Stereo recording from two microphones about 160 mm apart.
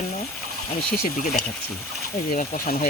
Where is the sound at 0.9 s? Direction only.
65° left (ahead or behind).